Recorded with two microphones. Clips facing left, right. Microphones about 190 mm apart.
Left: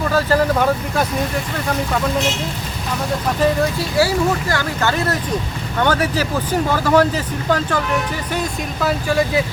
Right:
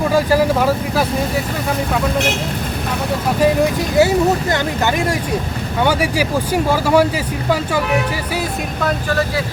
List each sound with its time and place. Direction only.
0.1 s speech: 10° right (ahead or behind)
3.4 s speech: 20° right (ahead or behind)
8.4 s speech: 5° left (ahead or behind)